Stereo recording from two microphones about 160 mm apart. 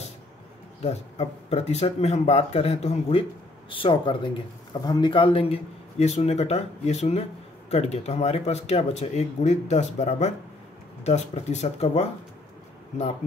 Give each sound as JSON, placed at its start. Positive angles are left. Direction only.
{"t": 0.8, "sound": "speech", "side_deg": 40}